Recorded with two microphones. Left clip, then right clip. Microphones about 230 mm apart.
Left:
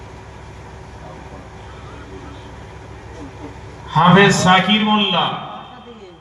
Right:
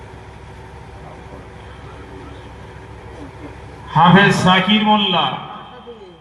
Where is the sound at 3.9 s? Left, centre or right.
Right.